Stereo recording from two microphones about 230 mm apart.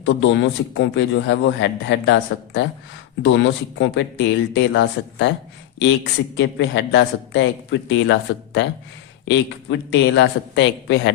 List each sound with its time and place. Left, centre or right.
0.0 s a man's voice: left
6.3 s a man's voice: left